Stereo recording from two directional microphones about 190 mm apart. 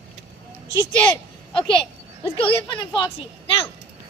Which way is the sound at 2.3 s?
25° left (ahead or behind).